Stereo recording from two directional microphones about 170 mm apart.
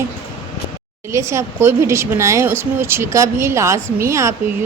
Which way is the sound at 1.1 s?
15° right (ahead or behind).